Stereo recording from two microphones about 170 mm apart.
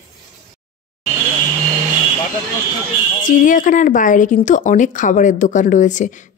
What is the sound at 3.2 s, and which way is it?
Speech, 50° left (ahead or behind).